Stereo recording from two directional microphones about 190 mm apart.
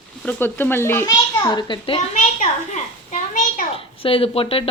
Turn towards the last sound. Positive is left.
turn(degrees=30)  # may be behind; listen again after turning